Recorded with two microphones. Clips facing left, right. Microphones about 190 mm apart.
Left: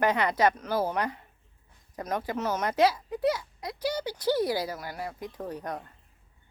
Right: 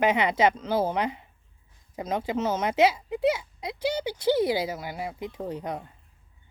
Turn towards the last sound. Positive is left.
turn(degrees=-20)  # may be behind; listen again after turning